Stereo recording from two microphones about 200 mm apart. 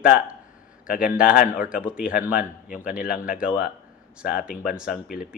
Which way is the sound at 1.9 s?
5° right (ahead or behind).